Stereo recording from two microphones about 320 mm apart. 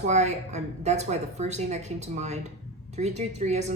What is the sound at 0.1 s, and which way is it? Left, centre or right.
A woman's voice, right.